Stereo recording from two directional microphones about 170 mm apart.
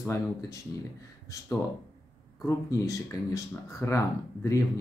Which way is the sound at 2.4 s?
20° left (ahead or behind).